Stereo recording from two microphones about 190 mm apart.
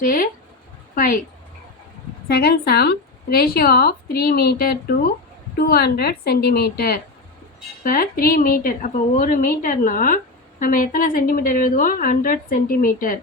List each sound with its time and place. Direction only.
0.0 s a woman's voice: 45° left (ahead or behind)
2.2 s a woman's voice: 55° left (ahead or behind)